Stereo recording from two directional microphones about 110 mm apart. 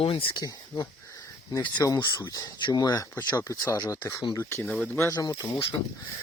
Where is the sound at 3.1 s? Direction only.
25° left (ahead or behind).